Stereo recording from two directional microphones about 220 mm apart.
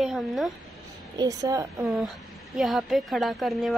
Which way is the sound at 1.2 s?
15° right (ahead or behind).